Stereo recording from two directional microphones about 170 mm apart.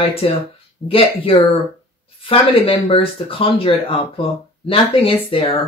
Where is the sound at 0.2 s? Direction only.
30° left (ahead or behind).